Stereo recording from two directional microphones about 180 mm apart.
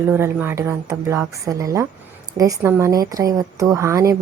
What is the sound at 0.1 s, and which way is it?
A woman's voice, 10° right (ahead or behind).